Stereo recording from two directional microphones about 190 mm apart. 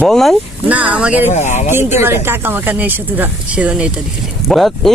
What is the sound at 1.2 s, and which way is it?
Speech, 40° left (ahead or behind).